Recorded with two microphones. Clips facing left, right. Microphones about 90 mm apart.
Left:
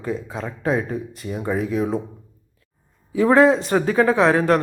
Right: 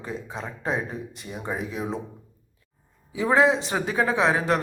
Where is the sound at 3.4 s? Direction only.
50° left (ahead or behind).